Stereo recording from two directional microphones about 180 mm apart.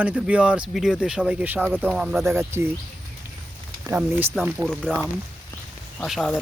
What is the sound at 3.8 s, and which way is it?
Speech, 10° right (ahead or behind).